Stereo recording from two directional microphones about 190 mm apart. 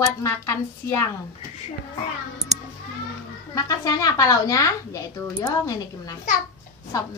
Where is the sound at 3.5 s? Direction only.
20° left (ahead or behind).